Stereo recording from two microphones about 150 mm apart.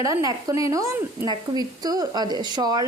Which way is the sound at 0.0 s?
20° right (ahead or behind).